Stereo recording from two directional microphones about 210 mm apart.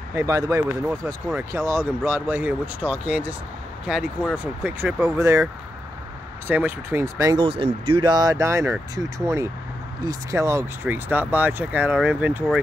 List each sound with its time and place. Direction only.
0.1 s speech: 15° right (ahead or behind)
7.4 s speech: 25° right (ahead or behind); by 12.4 s 10° right (ahead or behind)